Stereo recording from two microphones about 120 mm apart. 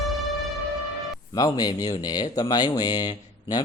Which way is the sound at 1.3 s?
30° left (ahead or behind).